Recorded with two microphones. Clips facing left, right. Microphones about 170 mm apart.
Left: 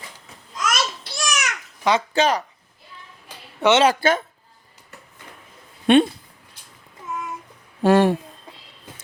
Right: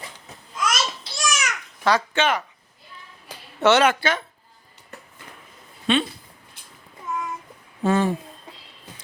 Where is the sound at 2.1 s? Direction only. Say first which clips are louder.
Left 3 dB; 35° left (ahead or behind).